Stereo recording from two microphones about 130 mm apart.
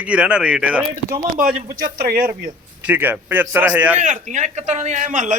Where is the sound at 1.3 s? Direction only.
90° right.